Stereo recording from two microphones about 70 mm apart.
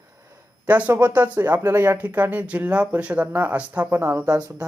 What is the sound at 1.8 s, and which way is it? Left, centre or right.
Speech, right.